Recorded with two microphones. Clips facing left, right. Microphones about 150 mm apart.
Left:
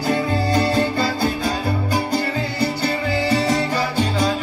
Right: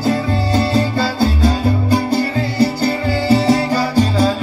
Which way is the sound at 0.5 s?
30° right (ahead or behind).